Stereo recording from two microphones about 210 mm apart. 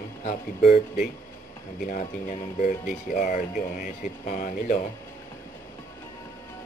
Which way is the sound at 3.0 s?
35° left (ahead or behind).